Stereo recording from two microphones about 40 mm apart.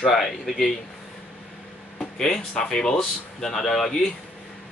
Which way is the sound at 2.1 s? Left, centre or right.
Centre.